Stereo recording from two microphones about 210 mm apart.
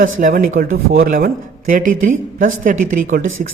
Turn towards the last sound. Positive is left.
turn(degrees=-40)  # may be behind; listen again after turning